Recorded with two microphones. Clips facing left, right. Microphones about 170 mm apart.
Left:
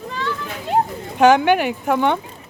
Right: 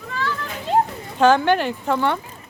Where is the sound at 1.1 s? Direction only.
15° left (ahead or behind).